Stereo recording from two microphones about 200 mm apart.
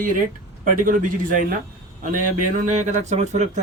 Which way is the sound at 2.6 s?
35° right (ahead or behind).